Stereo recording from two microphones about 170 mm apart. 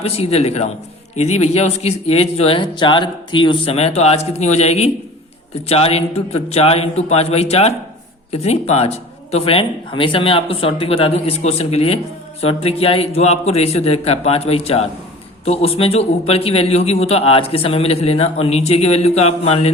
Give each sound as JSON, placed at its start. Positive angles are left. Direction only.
{"t": 0.0, "sound": "a man's voice", "side_deg": 35}